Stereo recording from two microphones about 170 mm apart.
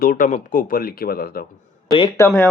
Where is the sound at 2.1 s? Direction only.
10° left (ahead or behind).